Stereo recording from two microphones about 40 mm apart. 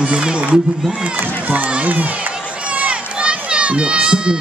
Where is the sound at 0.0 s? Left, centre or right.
Right.